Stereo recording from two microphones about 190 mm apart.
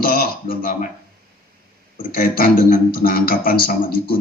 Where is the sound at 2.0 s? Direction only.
50° left (ahead or behind).